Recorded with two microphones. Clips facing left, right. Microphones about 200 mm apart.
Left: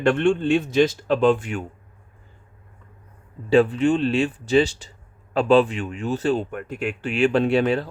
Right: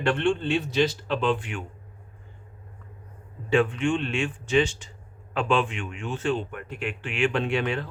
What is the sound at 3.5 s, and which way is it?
Speech, 35° left (ahead or behind).